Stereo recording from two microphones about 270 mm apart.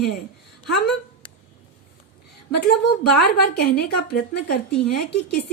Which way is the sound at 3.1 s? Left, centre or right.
Left.